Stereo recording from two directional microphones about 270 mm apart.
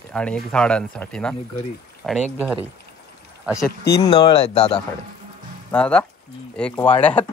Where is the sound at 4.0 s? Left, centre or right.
Centre.